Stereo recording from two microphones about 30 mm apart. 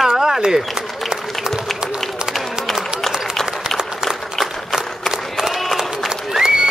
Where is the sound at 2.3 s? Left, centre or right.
Centre.